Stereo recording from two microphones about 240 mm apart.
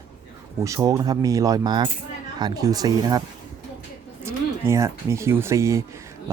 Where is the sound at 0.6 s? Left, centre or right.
Centre.